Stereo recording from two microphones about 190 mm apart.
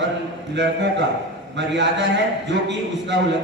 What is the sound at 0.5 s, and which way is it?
A man's voice, 65° right (ahead or behind).